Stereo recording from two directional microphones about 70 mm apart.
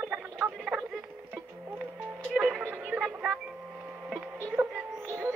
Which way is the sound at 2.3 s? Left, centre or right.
Centre.